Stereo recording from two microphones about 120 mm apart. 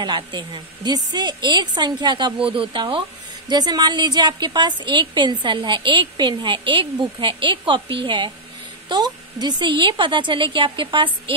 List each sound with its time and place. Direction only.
0.0 s a woman's voice: 40° right (ahead or behind)